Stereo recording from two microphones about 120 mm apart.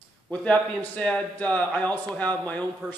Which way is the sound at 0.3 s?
10° left (ahead or behind).